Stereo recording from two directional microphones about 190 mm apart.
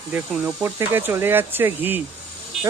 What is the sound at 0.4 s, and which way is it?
Speech, 10° right (ahead or behind).